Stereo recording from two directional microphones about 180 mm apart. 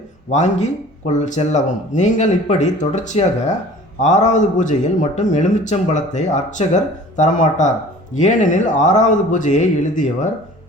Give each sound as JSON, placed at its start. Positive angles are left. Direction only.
{"t": 0.3, "sound": "a man's voice", "side_deg": 40}